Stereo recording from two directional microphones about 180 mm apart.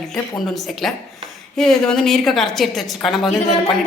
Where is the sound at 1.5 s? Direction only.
5° left (ahead or behind).